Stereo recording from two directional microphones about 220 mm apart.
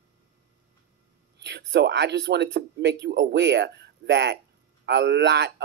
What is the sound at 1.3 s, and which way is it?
A man's voice, 50° right (ahead or behind).